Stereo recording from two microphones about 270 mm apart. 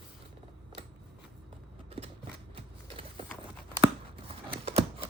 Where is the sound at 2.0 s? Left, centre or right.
Right.